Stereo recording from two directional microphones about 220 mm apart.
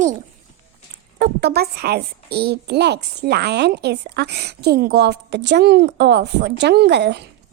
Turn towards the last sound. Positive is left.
turn(degrees=-50)  # may be behind; listen again after turning